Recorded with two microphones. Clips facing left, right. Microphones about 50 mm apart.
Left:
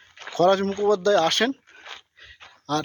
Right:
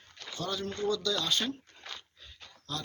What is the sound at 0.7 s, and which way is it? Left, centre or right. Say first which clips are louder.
Speech: left 12 dB; left.